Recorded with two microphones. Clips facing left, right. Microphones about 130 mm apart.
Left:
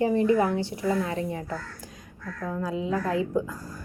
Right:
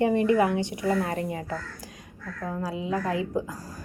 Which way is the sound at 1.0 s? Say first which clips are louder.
Even; 50° right (ahead or behind).